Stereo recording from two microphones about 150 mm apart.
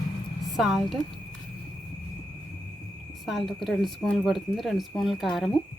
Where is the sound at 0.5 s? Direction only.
Centre (ahead or behind).